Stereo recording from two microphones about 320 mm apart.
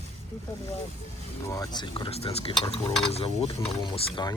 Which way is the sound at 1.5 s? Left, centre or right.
Centre.